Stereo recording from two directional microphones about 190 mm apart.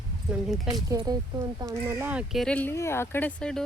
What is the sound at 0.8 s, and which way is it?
Speech, 20° right (ahead or behind).